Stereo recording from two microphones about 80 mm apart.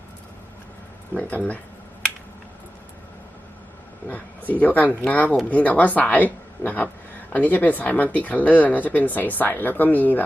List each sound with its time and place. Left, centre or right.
1.1 s speech: left
4.1 s speech: left